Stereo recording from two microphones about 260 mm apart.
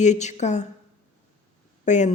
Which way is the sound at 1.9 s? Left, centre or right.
Left.